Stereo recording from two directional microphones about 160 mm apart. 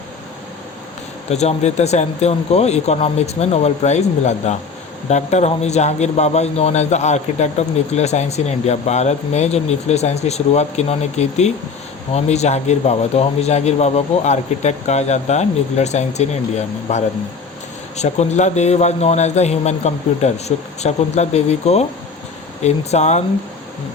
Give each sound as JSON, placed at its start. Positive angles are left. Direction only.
{"t": 1.3, "sound": "a man's voice", "side_deg": 45}